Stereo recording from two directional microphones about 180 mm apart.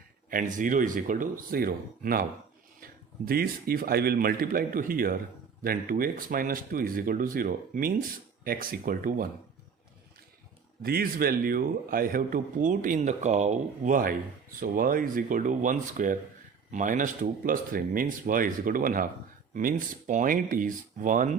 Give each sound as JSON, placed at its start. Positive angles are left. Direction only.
{"t": 0.3, "sound": "a man's voice", "side_deg": -50}
{"t": 10.8, "sound": "a man's voice", "side_deg": -55}